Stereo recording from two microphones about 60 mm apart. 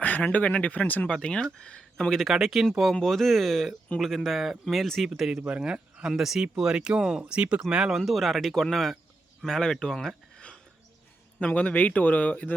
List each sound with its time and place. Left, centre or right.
0.0 s a man's voice: left
1.0 s speech: centre
2.3 s speech: centre
2.9 s speech: centre
5.4 s a man's voice: centre; by 12.5 s left